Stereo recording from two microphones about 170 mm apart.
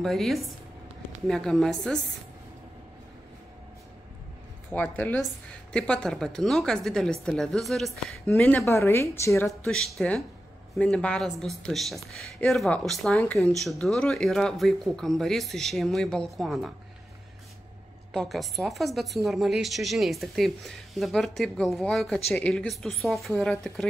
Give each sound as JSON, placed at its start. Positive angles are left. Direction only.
{"t": 0.0, "sound": "speech", "side_deg": 0}
{"t": 4.9, "sound": "speech", "side_deg": 5}
{"t": 8.4, "sound": "a woman's voice", "side_deg": 15}
{"t": 9.5, "sound": "speech", "side_deg": 0}
{"t": 18.1, "sound": "speech", "side_deg": 0}